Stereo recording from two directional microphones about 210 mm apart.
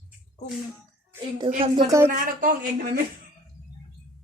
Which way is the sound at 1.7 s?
15° right (ahead or behind).